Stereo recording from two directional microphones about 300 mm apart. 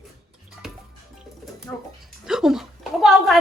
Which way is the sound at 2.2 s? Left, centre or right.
Centre.